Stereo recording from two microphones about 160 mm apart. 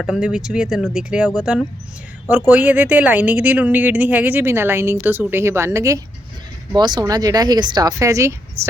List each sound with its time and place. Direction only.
0.0 s speech: 5° right (ahead or behind)